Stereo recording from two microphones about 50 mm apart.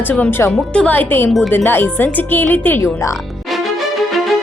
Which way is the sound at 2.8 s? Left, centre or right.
Left.